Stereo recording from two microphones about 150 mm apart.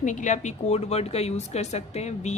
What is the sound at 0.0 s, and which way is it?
Speech, 55° left (ahead or behind).